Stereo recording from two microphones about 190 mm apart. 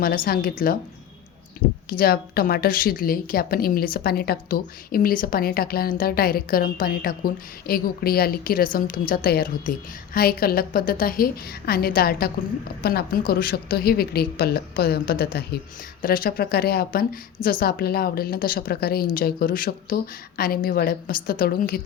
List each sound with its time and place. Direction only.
0.0 s a woman's voice: 50° left (ahead or behind)
1.9 s a woman's voice: 55° left (ahead or behind)